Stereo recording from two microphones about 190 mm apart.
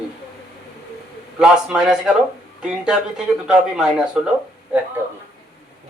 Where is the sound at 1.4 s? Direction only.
5° right (ahead or behind).